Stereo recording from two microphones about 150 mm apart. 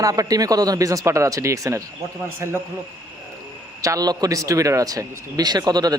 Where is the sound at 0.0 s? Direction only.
25° right (ahead or behind).